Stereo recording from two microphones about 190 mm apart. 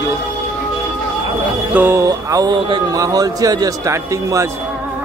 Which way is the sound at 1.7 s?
15° right (ahead or behind).